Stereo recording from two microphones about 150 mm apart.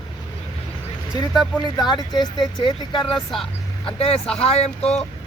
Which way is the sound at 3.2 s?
Centre (ahead or behind).